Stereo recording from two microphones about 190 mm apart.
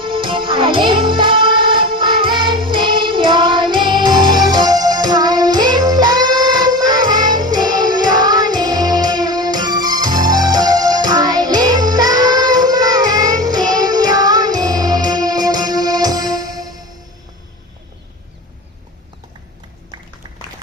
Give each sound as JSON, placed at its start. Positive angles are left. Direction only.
{"t": 0.0, "sound": "music", "side_deg": -25}